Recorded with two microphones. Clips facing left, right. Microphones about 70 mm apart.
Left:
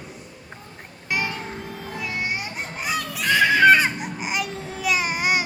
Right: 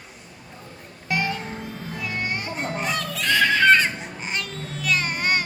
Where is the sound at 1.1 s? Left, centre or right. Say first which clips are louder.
Right 1 dB; centre.